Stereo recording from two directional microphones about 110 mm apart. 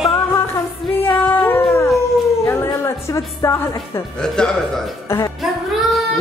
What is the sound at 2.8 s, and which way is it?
A woman's voice, 25° left (ahead or behind).